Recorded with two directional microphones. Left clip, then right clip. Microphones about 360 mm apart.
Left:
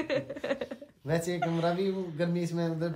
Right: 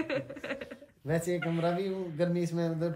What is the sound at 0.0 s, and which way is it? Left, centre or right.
Speech, centre.